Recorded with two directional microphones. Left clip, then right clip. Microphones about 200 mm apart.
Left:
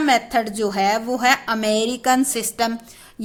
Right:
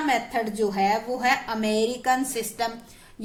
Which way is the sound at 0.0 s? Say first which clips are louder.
Left 6 dB; 45° left (ahead or behind).